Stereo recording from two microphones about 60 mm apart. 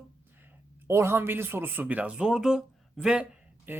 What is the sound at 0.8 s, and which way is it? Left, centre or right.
Speech, right.